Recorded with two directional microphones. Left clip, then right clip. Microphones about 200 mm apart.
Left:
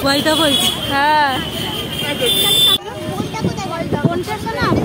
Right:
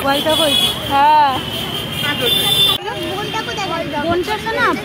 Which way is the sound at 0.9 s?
10° left (ahead or behind).